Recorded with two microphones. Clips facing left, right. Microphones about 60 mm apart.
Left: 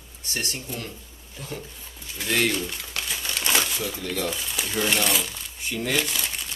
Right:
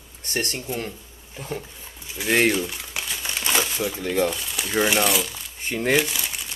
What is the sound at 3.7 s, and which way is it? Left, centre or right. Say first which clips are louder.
Speech: right 6 dB; right.